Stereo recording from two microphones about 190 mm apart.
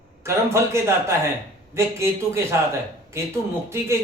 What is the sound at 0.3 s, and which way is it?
Speech, 15° right (ahead or behind).